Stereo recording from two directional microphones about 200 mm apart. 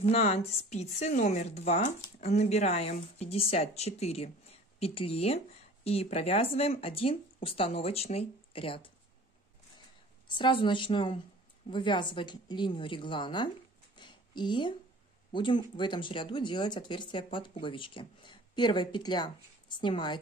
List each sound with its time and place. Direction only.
0.0 s speech: 30° left (ahead or behind)
10.2 s speech: 25° left (ahead or behind)
13.9 s a sound: 20° left (ahead or behind)
15.3 s speech: 25° left (ahead or behind)